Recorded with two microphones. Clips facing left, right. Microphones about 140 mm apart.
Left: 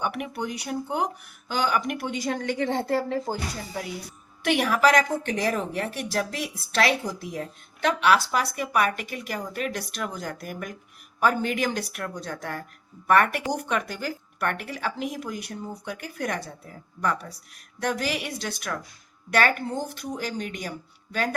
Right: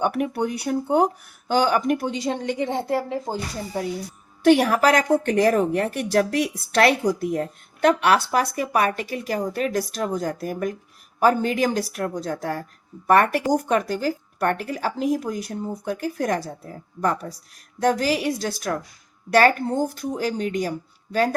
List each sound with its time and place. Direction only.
0.0 s speech: 40° right (ahead or behind)
0.3 s speech: 55° right (ahead or behind)
1.5 s speech: 40° right (ahead or behind)
2.2 s a woman's voice: 20° right (ahead or behind)
4.4 s a woman's voice: 40° right (ahead or behind)